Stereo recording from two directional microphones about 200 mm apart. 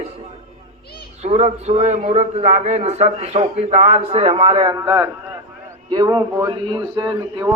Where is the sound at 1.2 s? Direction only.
35° right (ahead or behind).